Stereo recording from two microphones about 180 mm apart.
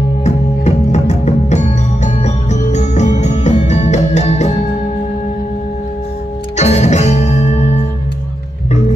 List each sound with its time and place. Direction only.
0.2 s music: 40° left (ahead or behind)
6.5 s music: 40° left (ahead or behind)